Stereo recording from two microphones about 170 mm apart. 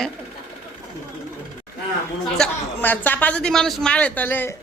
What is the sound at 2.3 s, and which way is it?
A man's voice, 5° left (ahead or behind).